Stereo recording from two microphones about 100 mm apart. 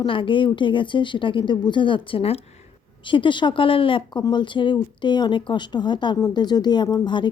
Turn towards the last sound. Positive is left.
turn(degrees=50)  # may be behind; listen again after turning